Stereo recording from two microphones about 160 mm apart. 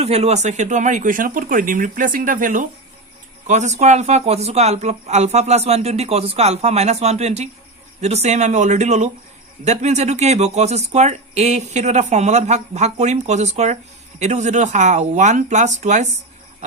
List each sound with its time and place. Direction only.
0.0 s a man's voice: 40° right (ahead or behind)